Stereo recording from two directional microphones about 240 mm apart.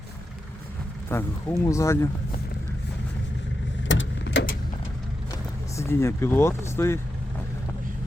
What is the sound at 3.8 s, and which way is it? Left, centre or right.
Vehicle, left.